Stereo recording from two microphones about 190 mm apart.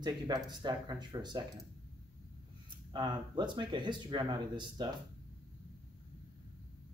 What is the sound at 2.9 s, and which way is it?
Speech, 25° right (ahead or behind).